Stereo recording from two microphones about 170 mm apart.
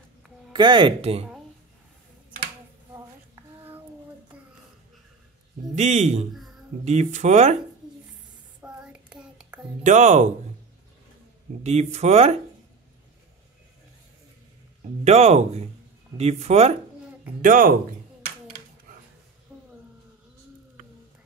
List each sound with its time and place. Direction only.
0.5 s speech: 30° right (ahead or behind)
5.8 s speech: 40° right (ahead or behind)
8.6 s child singing: 5° right (ahead or behind)
9.8 s speech: 45° right (ahead or behind)
11.6 s speech: 40° right (ahead or behind)
15.0 s speech: 40° right (ahead or behind)
17.4 s speech: 55° right (ahead or behind)
19.5 s a sound: 10° right (ahead or behind)